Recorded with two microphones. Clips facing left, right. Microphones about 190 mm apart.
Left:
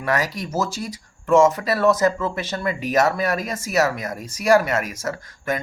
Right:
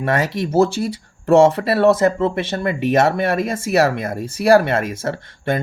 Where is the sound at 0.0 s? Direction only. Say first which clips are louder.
Right 4 dB; 25° right (ahead or behind).